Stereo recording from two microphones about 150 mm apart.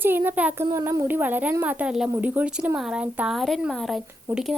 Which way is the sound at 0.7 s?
25° right (ahead or behind).